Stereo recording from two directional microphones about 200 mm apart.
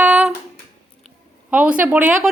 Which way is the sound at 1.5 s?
10° right (ahead or behind).